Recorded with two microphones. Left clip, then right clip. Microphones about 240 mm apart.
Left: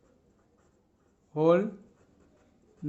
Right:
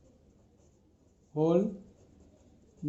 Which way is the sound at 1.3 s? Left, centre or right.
Left.